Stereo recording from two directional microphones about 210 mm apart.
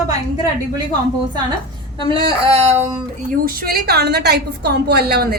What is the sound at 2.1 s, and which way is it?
Speech, 25° right (ahead or behind).